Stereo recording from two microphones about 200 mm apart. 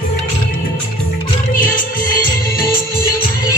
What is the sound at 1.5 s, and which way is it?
Music, 45° left (ahead or behind).